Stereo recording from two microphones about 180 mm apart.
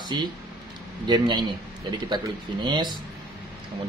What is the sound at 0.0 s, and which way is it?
Speech, 25° right (ahead or behind).